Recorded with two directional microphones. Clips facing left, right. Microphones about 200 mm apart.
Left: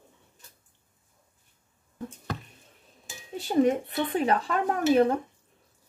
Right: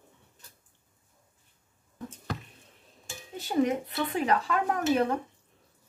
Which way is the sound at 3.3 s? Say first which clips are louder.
Left 4 dB; 30° left (ahead or behind).